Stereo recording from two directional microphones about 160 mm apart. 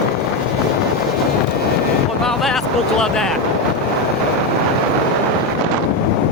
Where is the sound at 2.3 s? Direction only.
Centre (ahead or behind).